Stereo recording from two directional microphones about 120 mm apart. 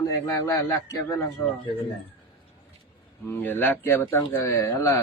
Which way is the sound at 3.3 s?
15° left (ahead or behind).